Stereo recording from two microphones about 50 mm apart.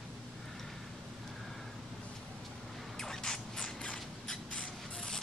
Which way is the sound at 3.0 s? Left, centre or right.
Centre.